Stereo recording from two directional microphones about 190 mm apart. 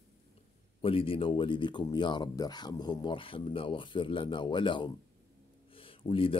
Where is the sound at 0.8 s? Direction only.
30° left (ahead or behind).